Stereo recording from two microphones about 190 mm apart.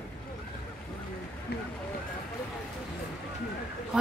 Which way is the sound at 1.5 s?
60° left (ahead or behind).